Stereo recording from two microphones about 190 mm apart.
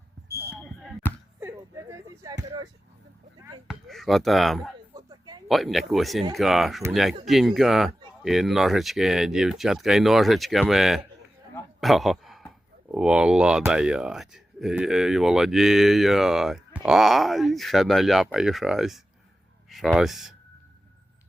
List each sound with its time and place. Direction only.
0.3 s basketball bounce: 10° right (ahead or behind)
0.6 s basketball bounce: 5° left (ahead or behind)
1.4 s a sound: 15° right (ahead or behind)
3.7 s speech: centre (ahead or behind)
4.9 s a sound: 20° right (ahead or behind)
5.5 s speech: centre (ahead or behind)